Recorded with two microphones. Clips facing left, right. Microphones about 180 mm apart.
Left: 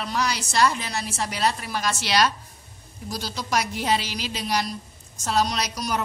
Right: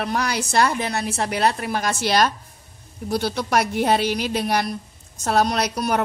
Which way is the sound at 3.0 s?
60° right (ahead or behind).